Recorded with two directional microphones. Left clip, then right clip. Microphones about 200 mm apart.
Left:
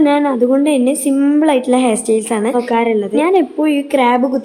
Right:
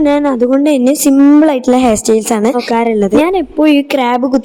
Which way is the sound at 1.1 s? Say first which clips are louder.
Right 5 dB; 30° right (ahead or behind).